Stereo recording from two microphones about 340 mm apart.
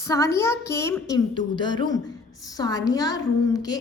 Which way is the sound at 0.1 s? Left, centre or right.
Centre.